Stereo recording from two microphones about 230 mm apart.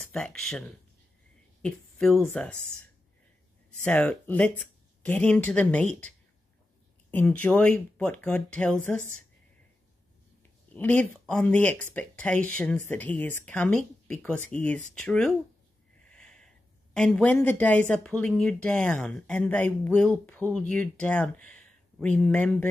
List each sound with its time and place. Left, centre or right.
0.0 s speech: centre
3.8 s speech: centre
10.7 s speech: centre
16.2 s a sound: centre
16.9 s speech: centre